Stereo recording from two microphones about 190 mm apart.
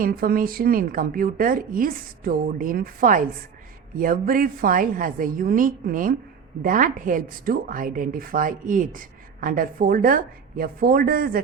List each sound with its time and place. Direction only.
0.0 s a woman's voice: 50° right (ahead or behind)